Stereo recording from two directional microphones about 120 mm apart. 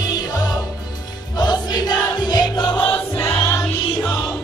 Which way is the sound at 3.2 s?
25° left (ahead or behind).